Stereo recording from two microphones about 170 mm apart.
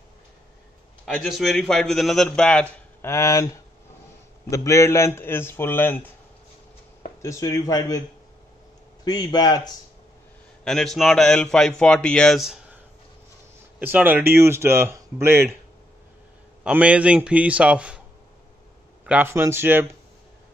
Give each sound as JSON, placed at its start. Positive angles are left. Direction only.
{"t": 1.0, "sound": "a man's voice", "side_deg": 0}
{"t": 4.5, "sound": "a man's voice", "side_deg": 15}
{"t": 7.2, "sound": "speech", "side_deg": 20}
{"t": 9.0, "sound": "speech", "side_deg": 25}
{"t": 10.6, "sound": "a man's voice", "side_deg": 5}
{"t": 13.7, "sound": "speech", "side_deg": -10}
{"t": 16.6, "sound": "speech", "side_deg": -5}
{"t": 19.0, "sound": "speech", "side_deg": -10}